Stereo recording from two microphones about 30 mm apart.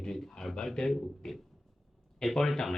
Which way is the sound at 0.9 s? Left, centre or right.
Centre.